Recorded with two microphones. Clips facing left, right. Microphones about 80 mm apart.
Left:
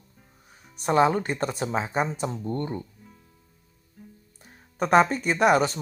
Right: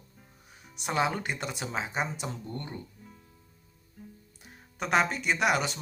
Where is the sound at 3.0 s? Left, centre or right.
Centre.